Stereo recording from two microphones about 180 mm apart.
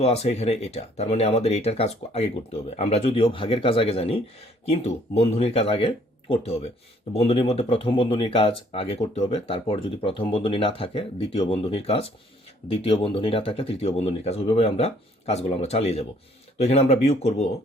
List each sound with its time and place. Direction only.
0.0 s speech: 35° left (ahead or behind)